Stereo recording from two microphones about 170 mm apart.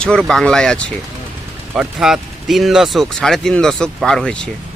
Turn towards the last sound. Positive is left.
turn(degrees=5)  # may be behind; listen again after turning